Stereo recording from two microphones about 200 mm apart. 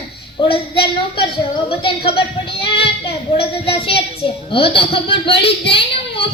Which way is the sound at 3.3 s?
30° left (ahead or behind).